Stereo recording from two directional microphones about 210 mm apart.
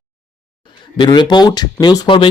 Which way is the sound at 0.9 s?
20° left (ahead or behind).